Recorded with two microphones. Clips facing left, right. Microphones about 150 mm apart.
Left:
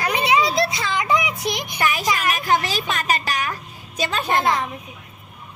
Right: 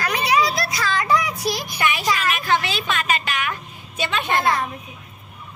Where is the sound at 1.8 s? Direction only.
40° left (ahead or behind).